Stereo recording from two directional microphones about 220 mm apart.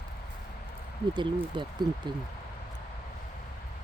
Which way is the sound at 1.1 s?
20° right (ahead or behind).